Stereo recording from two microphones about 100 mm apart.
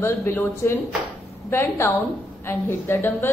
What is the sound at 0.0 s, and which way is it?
A woman's voice, 25° left (ahead or behind).